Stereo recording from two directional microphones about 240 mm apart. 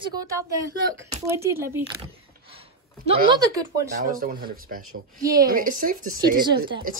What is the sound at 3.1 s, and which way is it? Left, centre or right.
Speech, centre.